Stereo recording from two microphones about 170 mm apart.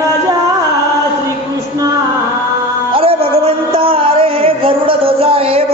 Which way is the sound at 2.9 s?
35° right (ahead or behind).